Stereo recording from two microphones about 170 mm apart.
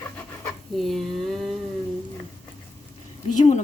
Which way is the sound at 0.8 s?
Centre (ahead or behind).